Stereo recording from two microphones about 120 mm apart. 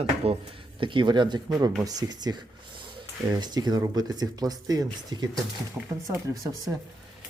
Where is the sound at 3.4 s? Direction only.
35° right (ahead or behind).